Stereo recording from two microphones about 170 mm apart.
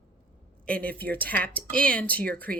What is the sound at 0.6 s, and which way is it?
Speech, 10° left (ahead or behind).